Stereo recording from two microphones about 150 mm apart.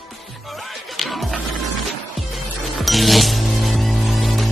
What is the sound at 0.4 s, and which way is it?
Music, centre (ahead or behind).